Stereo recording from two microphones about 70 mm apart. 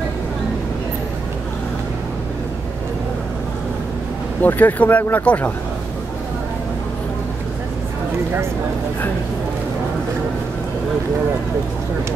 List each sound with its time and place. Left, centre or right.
4.4 s speech: left